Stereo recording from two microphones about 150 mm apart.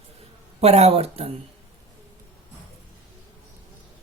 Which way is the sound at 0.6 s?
45° right (ahead or behind).